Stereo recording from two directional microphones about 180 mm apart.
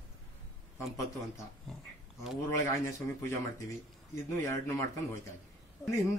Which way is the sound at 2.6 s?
15° left (ahead or behind).